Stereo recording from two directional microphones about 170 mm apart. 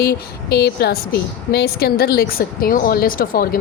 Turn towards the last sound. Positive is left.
turn(degrees=60)  # may be behind; listen again after turning